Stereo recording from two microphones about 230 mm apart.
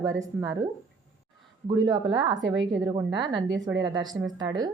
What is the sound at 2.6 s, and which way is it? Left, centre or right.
Speech, right.